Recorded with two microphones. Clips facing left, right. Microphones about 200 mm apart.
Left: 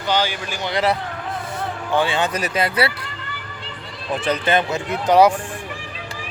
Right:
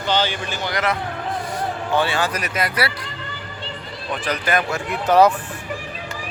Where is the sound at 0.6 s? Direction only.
30° left (ahead or behind).